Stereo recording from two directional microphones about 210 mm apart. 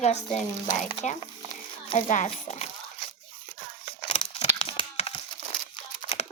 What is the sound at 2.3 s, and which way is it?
Speech, 30° left (ahead or behind).